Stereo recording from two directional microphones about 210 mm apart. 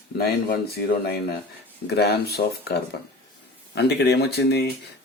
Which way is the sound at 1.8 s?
50° left (ahead or behind).